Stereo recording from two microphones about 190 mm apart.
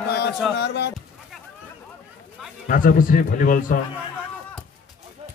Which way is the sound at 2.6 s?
45° left (ahead or behind).